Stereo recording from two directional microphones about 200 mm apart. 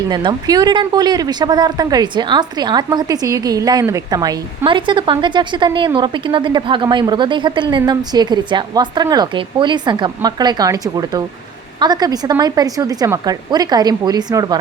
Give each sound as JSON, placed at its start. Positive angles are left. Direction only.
{"t": 0.1, "sound": "speech", "side_deg": -20}